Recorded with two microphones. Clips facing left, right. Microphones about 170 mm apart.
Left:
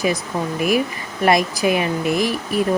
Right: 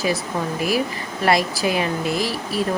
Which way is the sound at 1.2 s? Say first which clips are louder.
Left 3 dB; 20° left (ahead or behind).